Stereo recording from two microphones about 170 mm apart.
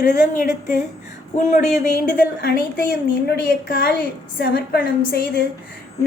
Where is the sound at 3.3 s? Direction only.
65° left (ahead or behind).